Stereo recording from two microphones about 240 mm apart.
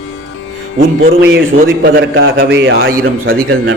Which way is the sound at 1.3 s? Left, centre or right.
Right.